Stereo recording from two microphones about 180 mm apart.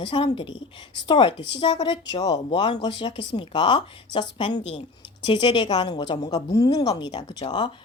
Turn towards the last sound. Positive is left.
turn(degrees=25)  # may be behind; listen again after turning